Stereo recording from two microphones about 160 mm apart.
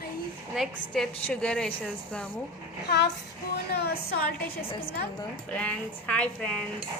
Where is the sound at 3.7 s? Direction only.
80° left.